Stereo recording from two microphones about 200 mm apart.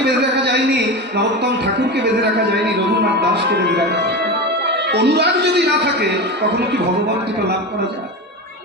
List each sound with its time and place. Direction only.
0.0 s a man's voice: 55° right (ahead or behind)